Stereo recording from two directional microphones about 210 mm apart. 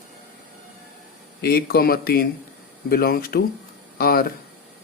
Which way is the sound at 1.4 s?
45° left (ahead or behind).